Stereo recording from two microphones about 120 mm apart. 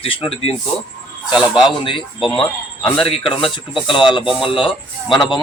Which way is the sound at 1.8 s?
45° left (ahead or behind).